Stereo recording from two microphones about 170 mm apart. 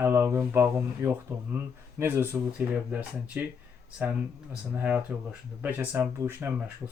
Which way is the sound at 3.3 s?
10° right (ahead or behind).